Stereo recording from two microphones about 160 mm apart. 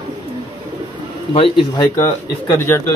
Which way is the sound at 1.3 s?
35° left (ahead or behind).